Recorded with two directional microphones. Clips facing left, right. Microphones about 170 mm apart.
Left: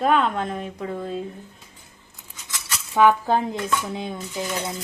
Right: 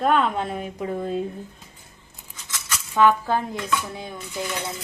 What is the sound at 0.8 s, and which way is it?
Speech, 25° right (ahead or behind).